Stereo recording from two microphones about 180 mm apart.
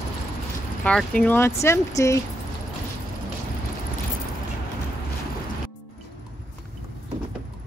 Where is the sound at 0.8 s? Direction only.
5° left (ahead or behind).